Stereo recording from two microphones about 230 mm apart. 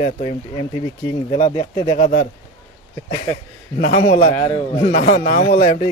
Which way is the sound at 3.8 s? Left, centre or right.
Left.